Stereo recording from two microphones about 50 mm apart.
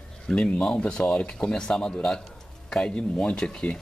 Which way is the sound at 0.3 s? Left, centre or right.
Left.